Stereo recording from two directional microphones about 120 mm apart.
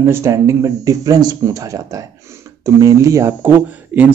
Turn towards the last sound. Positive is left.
turn(degrees=-15)  # may be behind; listen again after turning